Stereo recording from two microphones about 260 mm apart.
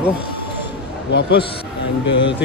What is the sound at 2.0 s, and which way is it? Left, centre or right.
Speech, left.